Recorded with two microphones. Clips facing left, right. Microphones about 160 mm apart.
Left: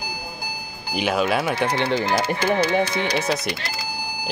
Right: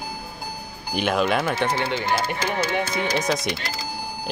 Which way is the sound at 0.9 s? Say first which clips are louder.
Even; 5° left (ahead or behind).